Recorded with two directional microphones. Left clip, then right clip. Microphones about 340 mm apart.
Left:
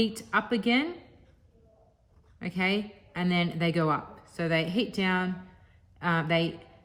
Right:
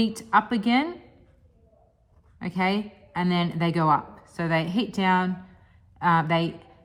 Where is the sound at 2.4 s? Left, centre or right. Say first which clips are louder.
Right 3 dB; centre.